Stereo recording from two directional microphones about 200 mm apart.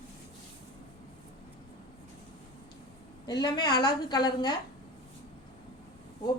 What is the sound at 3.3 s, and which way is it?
A woman's voice, 20° left (ahead or behind).